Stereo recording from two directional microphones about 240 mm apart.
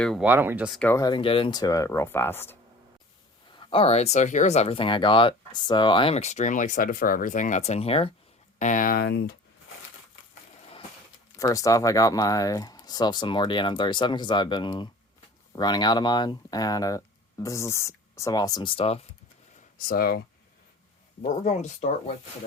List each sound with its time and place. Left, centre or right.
0.0 s speech: centre
3.5 s speech: left
11.3 s speech: centre
19.9 s speech: left